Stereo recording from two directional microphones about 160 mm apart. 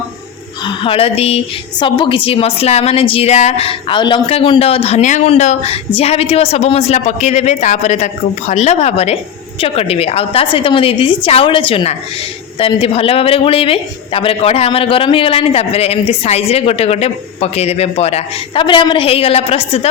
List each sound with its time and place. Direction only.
0.6 s a woman's voice: 35° left (ahead or behind)